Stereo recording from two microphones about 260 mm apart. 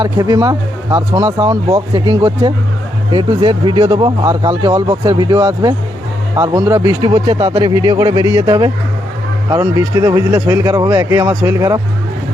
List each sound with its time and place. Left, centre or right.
0.0 s speech: centre